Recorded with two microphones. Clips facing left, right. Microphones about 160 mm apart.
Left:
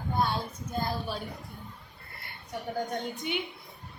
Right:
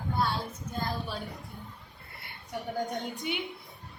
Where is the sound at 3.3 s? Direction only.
5° right (ahead or behind).